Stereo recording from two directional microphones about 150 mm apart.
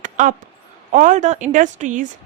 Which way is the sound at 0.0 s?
55° right (ahead or behind).